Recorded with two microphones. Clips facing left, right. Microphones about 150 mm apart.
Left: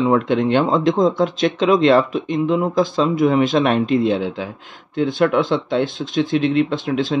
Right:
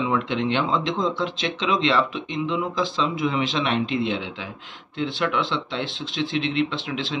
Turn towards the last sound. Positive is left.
turn(degrees=45)  # may be behind; listen again after turning